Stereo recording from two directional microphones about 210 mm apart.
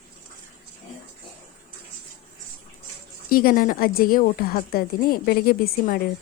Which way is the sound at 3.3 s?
45° left (ahead or behind).